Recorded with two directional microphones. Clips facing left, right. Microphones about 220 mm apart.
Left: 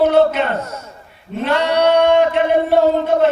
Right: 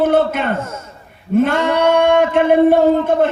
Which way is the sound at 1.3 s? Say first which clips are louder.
Right 3 dB; 50° right (ahead or behind).